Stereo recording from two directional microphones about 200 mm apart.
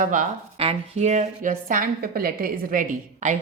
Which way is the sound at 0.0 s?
40° right (ahead or behind).